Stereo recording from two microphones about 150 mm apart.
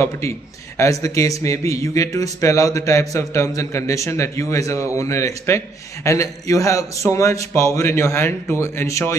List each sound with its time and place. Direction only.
0.7 s speech: 20° left (ahead or behind)